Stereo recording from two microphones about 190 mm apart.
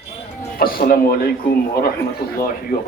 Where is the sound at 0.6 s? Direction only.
50° left (ahead or behind).